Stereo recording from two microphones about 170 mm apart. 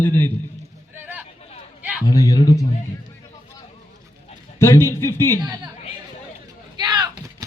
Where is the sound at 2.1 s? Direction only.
20° left (ahead or behind).